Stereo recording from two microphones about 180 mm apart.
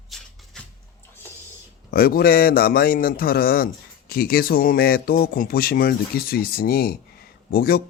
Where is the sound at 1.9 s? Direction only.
55° left (ahead or behind).